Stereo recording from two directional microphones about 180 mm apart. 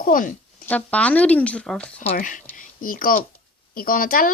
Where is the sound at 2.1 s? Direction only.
45° left (ahead or behind).